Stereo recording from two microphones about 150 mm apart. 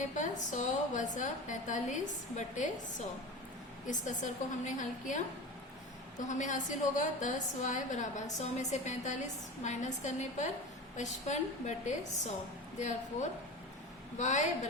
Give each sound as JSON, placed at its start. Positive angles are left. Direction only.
{"t": 0.2, "sound": "a woman's voice", "side_deg": 55}
{"t": 3.8, "sound": "a woman's voice", "side_deg": 55}
{"t": 14.2, "sound": "a woman's voice", "side_deg": 50}